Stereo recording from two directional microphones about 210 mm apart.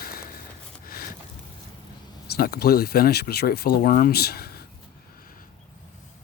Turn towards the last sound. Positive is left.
turn(degrees=45)  # may be behind; listen again after turning